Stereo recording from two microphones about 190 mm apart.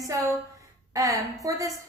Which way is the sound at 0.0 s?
15° right (ahead or behind).